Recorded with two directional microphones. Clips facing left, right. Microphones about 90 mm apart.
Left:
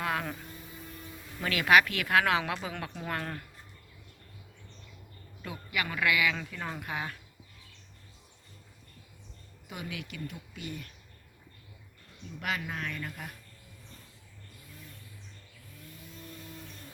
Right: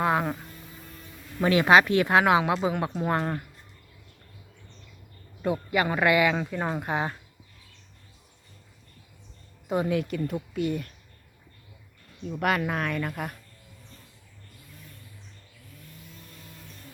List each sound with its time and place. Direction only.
0.0 s speech: 25° right (ahead or behind)
5.4 s speech: 30° right (ahead or behind)
9.6 s speech: 40° right (ahead or behind)
12.3 s speech: 55° right (ahead or behind)